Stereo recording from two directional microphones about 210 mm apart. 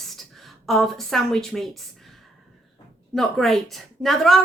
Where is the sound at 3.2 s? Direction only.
Centre (ahead or behind).